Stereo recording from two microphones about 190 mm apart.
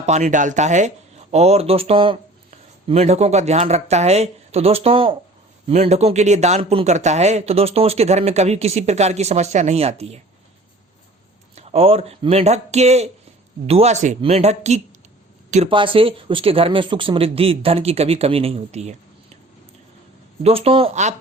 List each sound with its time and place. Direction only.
0.0 s speech: 40° right (ahead or behind)
11.5 s speech: 30° right (ahead or behind)
20.4 s speech: 30° right (ahead or behind)